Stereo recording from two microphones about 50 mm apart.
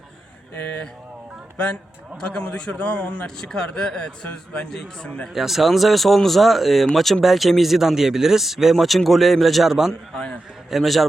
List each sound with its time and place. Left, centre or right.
1.5 s a man's voice: left
5.3 s speech: centre